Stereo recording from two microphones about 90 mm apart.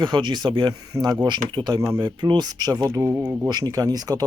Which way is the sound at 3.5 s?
45° right (ahead or behind).